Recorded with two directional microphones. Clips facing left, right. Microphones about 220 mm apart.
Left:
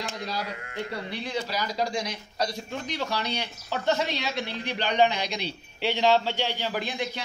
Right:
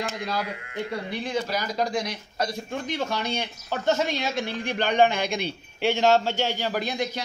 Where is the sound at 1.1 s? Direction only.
50° right (ahead or behind).